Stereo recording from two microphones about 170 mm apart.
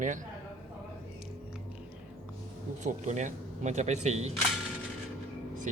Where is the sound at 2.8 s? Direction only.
45° right (ahead or behind).